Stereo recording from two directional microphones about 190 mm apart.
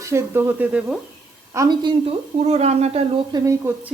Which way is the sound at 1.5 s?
20° right (ahead or behind).